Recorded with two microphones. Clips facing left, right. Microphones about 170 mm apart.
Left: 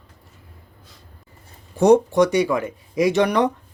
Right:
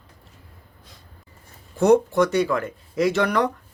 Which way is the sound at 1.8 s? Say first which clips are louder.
Left 2 dB; 15° left (ahead or behind).